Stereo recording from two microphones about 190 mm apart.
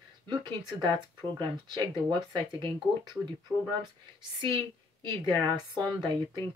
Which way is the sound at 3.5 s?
10° right (ahead or behind).